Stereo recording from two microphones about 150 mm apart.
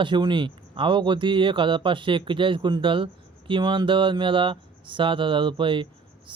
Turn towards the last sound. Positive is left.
turn(degrees=-35)  # may be behind; listen again after turning